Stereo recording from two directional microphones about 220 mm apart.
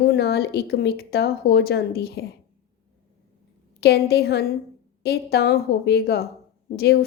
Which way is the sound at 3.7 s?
45° left (ahead or behind).